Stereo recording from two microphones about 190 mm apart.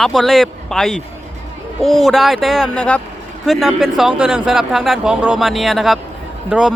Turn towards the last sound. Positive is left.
turn(degrees=-5)  # may be behind; listen again after turning